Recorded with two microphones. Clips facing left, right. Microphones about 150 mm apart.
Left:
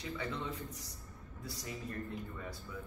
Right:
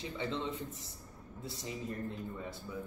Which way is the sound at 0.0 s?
25° right (ahead or behind).